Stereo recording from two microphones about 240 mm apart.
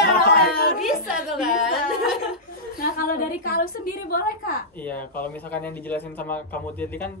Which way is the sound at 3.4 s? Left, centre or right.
Left.